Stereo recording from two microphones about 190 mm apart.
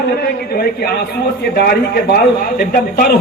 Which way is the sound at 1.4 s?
55° left (ahead or behind).